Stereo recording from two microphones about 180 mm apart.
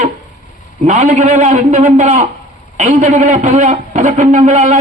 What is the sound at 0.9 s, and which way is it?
A man's voice, 40° right (ahead or behind).